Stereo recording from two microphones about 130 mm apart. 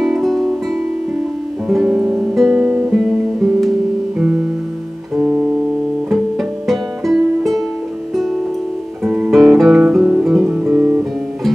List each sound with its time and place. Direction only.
0.0 s music: centre (ahead or behind)
1.7 s music: 5° right (ahead or behind)
5.1 s music: 5° right (ahead or behind)
9.0 s music: 5° right (ahead or behind)
10.6 s music: 15° right (ahead or behind)